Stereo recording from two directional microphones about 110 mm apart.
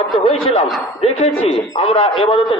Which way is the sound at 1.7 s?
55° left (ahead or behind).